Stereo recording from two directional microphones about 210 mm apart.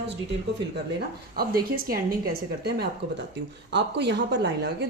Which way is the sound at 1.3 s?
45° right (ahead or behind).